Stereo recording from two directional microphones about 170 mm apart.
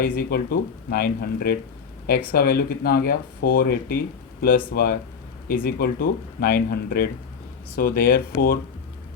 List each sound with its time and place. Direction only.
0.0 s speech: 60° left (ahead or behind)